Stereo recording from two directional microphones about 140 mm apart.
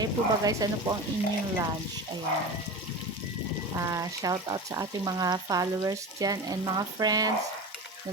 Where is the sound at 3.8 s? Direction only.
25° right (ahead or behind).